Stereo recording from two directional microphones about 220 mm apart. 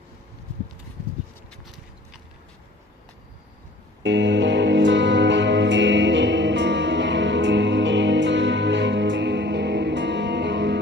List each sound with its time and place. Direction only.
4.0 s music: 55° right (ahead or behind)